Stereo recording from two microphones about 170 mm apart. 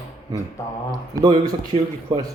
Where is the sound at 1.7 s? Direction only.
35° right (ahead or behind).